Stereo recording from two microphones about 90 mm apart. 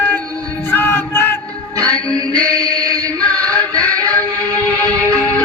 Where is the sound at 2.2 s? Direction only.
45° right (ahead or behind).